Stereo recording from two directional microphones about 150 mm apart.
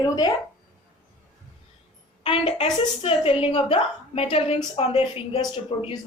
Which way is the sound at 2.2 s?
40° left (ahead or behind).